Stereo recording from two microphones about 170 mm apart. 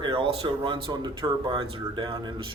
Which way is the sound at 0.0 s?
30° right (ahead or behind).